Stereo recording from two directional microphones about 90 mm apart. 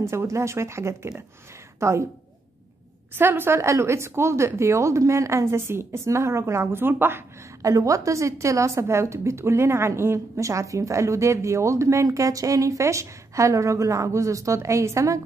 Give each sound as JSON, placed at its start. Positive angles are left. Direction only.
{"t": 0.0, "sound": "a woman's voice", "side_deg": -30}
{"t": 3.2, "sound": "a woman's voice", "side_deg": -25}
{"t": 7.6, "sound": "a woman's voice", "side_deg": -35}